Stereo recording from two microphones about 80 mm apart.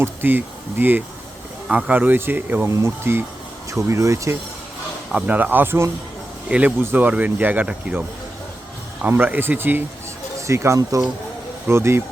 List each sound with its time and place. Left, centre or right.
0.0 s speech: right
2.6 s speech: right
3.7 s speech: right
5.1 s speech: centre
6.5 s speech: centre
9.0 s speech: right
10.4 s speech: right